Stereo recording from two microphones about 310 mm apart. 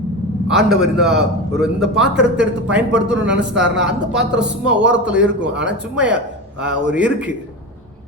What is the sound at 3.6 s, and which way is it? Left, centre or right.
Speech, centre.